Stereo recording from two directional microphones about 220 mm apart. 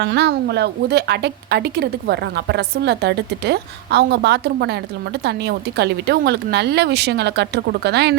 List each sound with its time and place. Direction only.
0.0 s a woman's voice: 50° right (ahead or behind)